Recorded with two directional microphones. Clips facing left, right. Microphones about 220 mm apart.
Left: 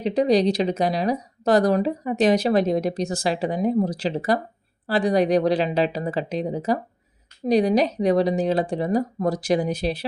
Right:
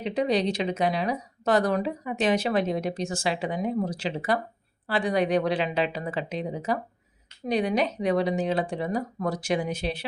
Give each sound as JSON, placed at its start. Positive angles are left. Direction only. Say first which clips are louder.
{"t": 0.0, "sound": "speech", "louder": "left 6 dB", "side_deg": 40}